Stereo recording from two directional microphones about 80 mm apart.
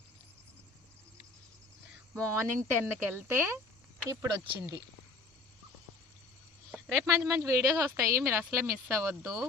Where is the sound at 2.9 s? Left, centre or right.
Right.